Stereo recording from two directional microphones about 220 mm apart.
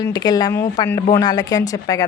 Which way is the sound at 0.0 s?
15° left (ahead or behind).